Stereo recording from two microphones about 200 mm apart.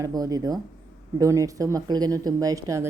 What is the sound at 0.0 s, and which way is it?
Speech, 20° right (ahead or behind).